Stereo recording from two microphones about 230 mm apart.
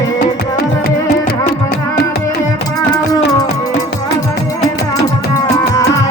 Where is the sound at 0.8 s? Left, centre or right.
Left.